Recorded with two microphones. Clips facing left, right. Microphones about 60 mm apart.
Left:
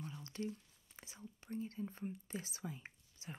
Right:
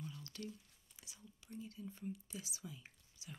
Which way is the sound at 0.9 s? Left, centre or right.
Left.